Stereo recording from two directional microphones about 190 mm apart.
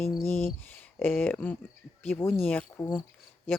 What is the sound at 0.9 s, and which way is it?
Speech, 10° left (ahead or behind).